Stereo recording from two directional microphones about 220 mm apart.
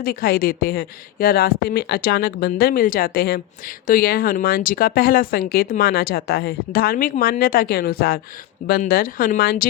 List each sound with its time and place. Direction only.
0.0 s speech: 40° left (ahead or behind)